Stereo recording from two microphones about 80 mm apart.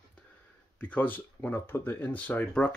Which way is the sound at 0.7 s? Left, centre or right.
Centre.